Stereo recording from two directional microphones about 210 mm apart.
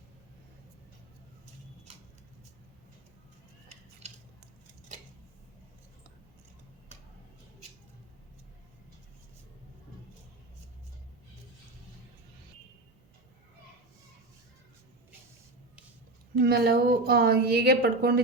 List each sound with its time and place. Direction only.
16.4 s a woman's voice: 50° right (ahead or behind)